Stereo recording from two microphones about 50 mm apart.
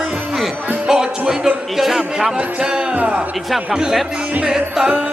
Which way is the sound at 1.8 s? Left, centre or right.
Centre.